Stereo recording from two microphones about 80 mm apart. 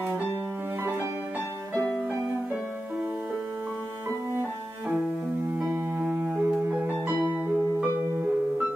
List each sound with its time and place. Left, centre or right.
6.1 s music: right